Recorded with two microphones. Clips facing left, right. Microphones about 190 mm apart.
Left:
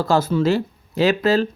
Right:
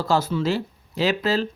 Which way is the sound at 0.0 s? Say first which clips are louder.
Left 4 dB; 50° left (ahead or behind).